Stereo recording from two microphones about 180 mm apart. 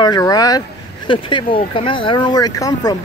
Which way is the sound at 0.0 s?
20° left (ahead or behind).